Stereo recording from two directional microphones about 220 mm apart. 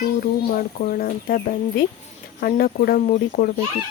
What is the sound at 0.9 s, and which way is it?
Speech, 45° left (ahead or behind).